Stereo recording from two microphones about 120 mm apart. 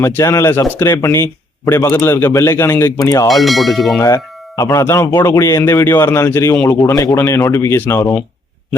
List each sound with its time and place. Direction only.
0.0 s speech: 25° left (ahead or behind)
3.2 s speech: centre (ahead or behind)
4.0 s speech: 25° left (ahead or behind)